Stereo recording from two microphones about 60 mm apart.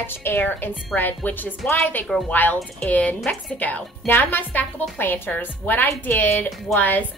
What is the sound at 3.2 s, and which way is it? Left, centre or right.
Speech, centre.